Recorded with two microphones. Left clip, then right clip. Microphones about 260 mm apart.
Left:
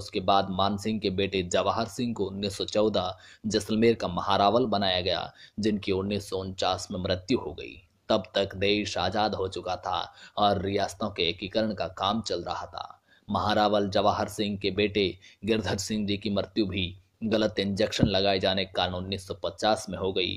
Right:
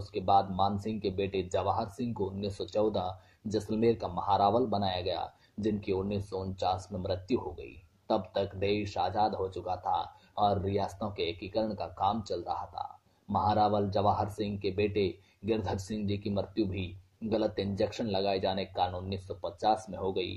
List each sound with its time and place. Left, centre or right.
0.1 s speech: left